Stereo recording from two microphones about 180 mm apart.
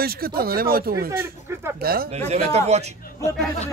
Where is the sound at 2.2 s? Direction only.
35° right (ahead or behind).